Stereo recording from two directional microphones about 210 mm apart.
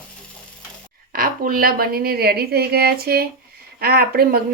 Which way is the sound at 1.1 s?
45° right (ahead or behind).